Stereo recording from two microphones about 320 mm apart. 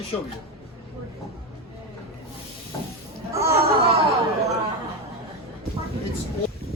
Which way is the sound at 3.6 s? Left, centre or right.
Right.